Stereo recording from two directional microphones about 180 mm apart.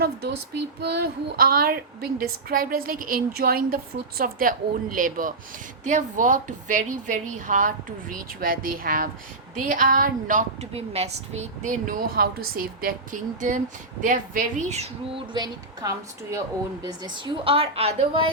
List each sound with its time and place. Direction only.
0.8 s a woman's voice: 65° right (ahead or behind); by 18.3 s 30° right (ahead or behind)